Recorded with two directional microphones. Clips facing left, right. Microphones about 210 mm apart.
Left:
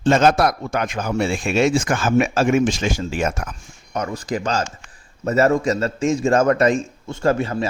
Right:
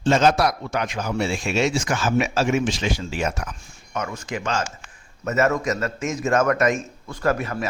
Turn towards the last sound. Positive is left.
turn(degrees=30)  # may be behind; listen again after turning